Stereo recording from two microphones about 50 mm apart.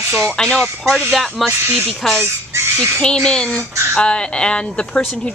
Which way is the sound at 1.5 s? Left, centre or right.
Right.